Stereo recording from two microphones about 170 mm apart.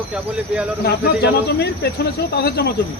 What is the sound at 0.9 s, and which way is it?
Speech, 70° left (ahead or behind).